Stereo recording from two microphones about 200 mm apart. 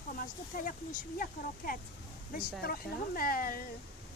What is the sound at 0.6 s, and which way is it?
Speech, 45° left (ahead or behind).